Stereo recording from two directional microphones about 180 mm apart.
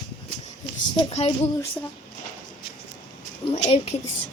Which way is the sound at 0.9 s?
30° left (ahead or behind).